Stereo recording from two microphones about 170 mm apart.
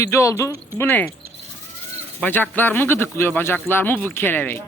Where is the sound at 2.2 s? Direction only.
10° left (ahead or behind).